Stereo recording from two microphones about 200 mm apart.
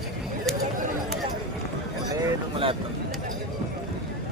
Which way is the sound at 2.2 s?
25° right (ahead or behind).